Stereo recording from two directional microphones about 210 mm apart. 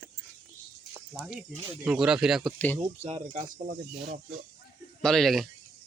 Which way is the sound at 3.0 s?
30° right (ahead or behind).